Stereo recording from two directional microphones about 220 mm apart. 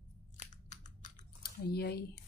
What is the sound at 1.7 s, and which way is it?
Speech, 45° left (ahead or behind).